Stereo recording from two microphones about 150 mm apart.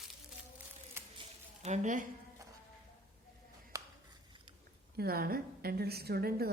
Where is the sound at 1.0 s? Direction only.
15° right (ahead or behind).